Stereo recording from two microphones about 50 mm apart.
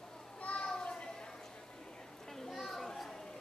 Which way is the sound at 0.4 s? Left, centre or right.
Left.